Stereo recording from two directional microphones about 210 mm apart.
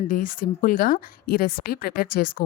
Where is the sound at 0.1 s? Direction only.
40° left (ahead or behind).